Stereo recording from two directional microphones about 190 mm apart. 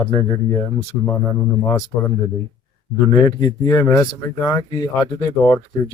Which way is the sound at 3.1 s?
20° left (ahead or behind).